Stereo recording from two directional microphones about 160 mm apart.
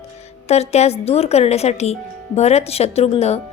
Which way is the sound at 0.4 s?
40° left (ahead or behind).